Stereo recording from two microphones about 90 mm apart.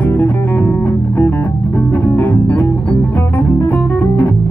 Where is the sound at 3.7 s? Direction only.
20° left (ahead or behind).